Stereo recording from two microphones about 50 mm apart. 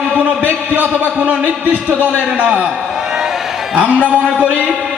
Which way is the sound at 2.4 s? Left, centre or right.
Right.